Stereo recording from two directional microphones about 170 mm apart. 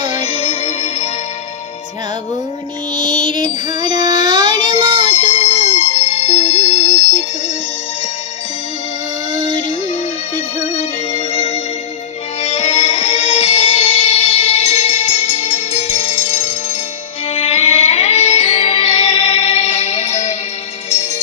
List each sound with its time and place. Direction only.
0.0 s music: 40° left (ahead or behind)
3.0 s music: 25° right (ahead or behind)
3.8 s child singing: 25° right (ahead or behind)
5.0 s music: 40° left (ahead or behind)
10.3 s music: 45° left (ahead or behind)